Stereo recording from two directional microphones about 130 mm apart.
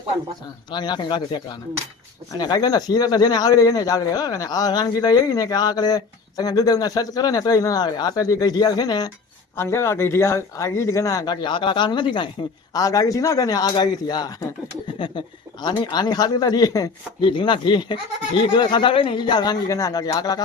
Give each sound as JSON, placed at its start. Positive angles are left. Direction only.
{"t": 0.7, "sound": "a man's voice", "side_deg": 35}
{"t": 9.6, "sound": "a man's voice", "side_deg": 20}
{"t": 12.7, "sound": "a man's voice", "side_deg": 25}